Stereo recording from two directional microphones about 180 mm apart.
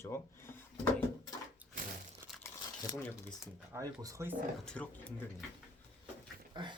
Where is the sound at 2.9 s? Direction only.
5° left (ahead or behind).